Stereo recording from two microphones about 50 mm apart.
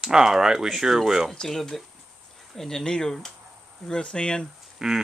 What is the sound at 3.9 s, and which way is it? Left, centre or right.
Speech, centre.